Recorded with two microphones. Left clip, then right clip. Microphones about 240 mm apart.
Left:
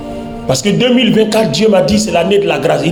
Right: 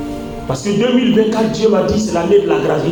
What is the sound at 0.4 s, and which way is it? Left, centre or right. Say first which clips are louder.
A man's voice: left 5 dB; left.